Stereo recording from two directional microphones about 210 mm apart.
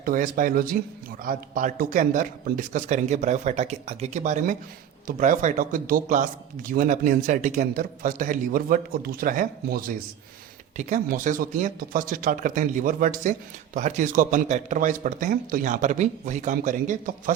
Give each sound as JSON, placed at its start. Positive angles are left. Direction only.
{"t": 0.0, "sound": "speech", "side_deg": -40}